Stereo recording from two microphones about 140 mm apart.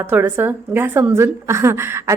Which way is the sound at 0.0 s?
15° right (ahead or behind).